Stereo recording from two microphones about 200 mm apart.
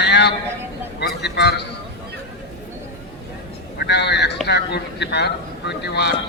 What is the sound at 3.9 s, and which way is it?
A man's voice, 60° left (ahead or behind).